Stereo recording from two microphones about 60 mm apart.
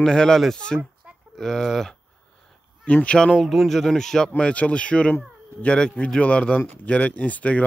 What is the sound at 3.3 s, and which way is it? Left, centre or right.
Speech, centre.